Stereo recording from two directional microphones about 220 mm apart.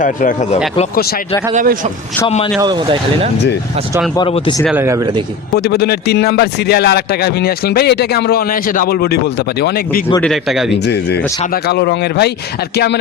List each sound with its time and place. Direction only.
0.0 s a man's voice: 35° left (ahead or behind)
1.5 s speech: 35° right (ahead or behind)
2.2 s speech: 25° left (ahead or behind)
2.6 s speech: 20° right (ahead or behind)
4.1 s speech: 25° left (ahead or behind)
4.6 s speech: 10° right (ahead or behind)
5.5 s a man's voice: 45° left (ahead or behind)
10.2 s speech: centre (ahead or behind)
10.8 s a man's voice: 50° left (ahead or behind)